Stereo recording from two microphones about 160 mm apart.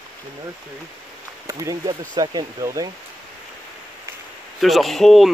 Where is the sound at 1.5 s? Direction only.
20° right (ahead or behind).